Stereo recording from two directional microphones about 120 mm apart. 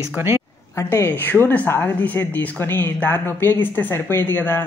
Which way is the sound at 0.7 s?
20° left (ahead or behind).